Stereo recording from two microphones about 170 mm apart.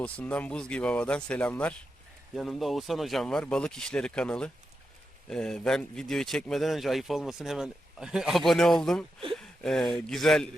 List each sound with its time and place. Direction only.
0.0 s speech: 5° left (ahead or behind)